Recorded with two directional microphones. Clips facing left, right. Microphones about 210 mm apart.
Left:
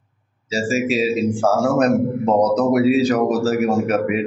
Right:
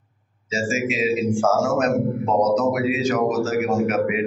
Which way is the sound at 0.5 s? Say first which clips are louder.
Left 4 dB; 35° left (ahead or behind).